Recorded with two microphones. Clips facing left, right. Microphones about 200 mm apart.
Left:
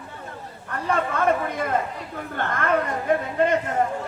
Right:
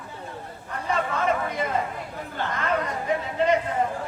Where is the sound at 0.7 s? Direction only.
55° left (ahead or behind).